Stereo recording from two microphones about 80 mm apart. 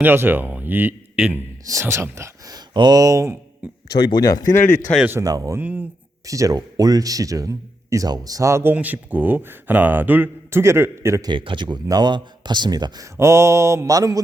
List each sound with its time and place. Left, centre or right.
0.0 s speech: right
1.6 s a sound: right
2.7 s speech: right
3.8 s speech: left
5.2 s speech: right
5.5 s speech: centre
6.2 s speech: right
8.7 s speech: centre
10.6 s a sound: right
11.2 s a man's voice: right
11.9 s a man's voice: right
13.0 s a sound: right